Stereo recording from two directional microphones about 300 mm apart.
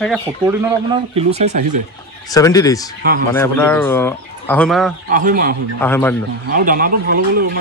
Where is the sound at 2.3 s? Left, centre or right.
Centre.